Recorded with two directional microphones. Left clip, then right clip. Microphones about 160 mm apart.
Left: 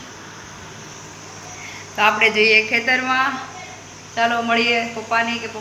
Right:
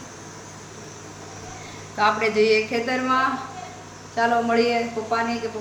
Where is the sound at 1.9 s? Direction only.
5° right (ahead or behind).